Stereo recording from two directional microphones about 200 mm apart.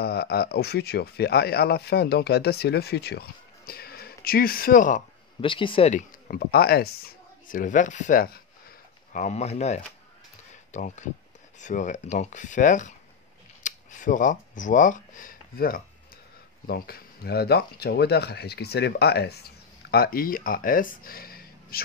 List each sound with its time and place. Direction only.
0.0 s speech: 55° left (ahead or behind)
5.4 s speech: 25° left (ahead or behind); by 21.8 s 50° left (ahead or behind)